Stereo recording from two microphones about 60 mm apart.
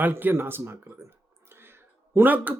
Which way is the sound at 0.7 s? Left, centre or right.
Right.